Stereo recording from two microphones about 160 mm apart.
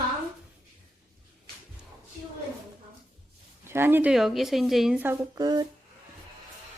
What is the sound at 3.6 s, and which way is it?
Speech, 15° right (ahead or behind).